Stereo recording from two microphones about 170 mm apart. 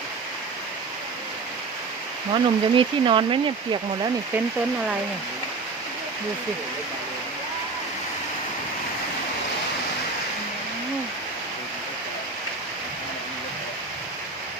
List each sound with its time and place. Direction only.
2.3 s speech: 30° right (ahead or behind)